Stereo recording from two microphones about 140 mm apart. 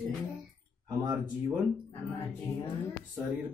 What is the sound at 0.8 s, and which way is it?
Speech, 25° right (ahead or behind).